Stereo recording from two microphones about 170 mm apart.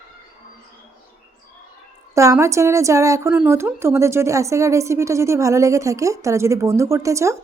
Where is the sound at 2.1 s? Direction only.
15° right (ahead or behind).